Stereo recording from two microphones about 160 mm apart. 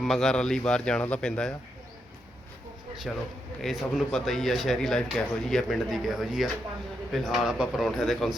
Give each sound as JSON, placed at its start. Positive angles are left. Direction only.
{"t": 0.0, "sound": "speech", "side_deg": 0}
{"t": 3.1, "sound": "speech", "side_deg": 0}